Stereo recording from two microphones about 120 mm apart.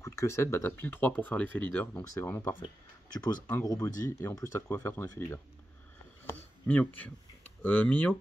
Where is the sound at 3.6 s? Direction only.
30° left (ahead or behind).